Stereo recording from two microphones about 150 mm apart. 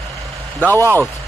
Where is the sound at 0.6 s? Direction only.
10° left (ahead or behind).